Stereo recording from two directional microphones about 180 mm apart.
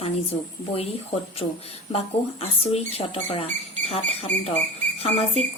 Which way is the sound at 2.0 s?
35° left (ahead or behind).